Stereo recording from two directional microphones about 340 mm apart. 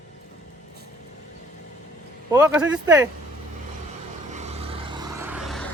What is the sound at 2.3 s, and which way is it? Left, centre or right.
Speech, centre.